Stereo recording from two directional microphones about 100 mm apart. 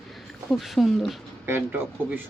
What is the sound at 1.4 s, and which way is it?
Speech, 20° right (ahead or behind).